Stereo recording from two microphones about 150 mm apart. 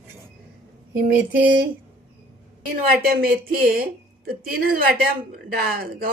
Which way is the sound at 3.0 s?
75° right (ahead or behind).